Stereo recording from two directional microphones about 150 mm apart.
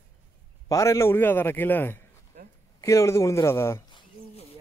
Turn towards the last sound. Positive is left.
turn(degrees=20)  # may be behind; listen again after turning